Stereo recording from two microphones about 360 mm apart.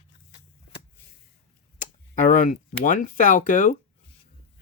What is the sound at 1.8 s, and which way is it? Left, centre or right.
Speech, left.